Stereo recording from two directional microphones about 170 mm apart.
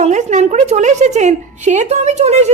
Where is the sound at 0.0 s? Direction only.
45° right (ahead or behind).